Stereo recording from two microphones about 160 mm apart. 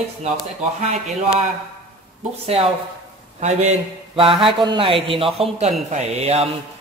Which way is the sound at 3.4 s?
45° right (ahead or behind).